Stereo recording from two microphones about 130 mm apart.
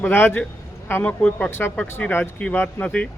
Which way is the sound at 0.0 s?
15° left (ahead or behind).